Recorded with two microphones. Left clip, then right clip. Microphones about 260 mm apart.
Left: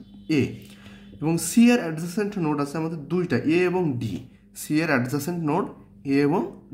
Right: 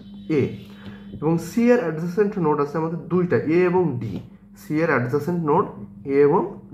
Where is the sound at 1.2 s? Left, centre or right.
Left.